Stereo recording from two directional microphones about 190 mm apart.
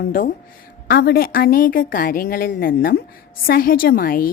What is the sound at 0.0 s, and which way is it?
A woman's voice, 45° left (ahead or behind).